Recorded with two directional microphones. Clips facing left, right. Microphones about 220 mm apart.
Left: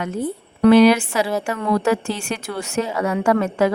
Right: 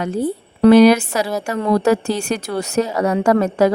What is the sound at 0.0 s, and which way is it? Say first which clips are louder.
A woman's voice: right 4 dB; 35° right (ahead or behind).